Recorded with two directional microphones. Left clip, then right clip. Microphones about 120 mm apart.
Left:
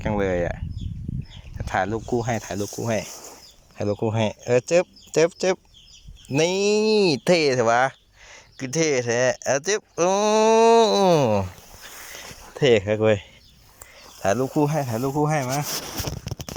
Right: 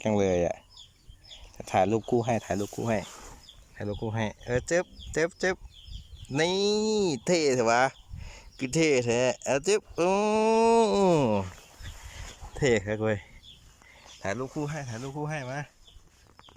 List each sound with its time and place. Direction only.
0.0 s speech: 20° right (ahead or behind)
3.8 s speech: 15° left (ahead or behind); by 11.4 s 15° right (ahead or behind)
12.5 s speech: centre (ahead or behind)
14.5 s speech: 45° left (ahead or behind)